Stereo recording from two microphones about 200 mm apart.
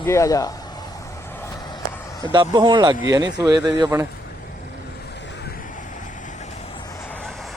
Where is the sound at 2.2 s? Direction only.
20° right (ahead or behind).